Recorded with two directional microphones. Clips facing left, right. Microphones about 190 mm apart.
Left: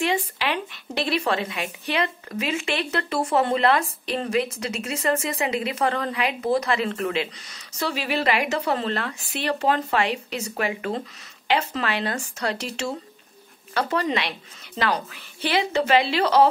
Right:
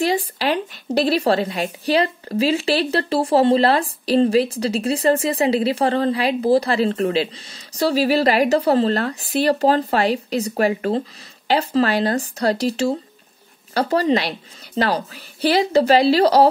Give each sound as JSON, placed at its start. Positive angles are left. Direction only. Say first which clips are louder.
{"t": 0.0, "sound": "speech", "louder": "right 5 dB", "side_deg": -35}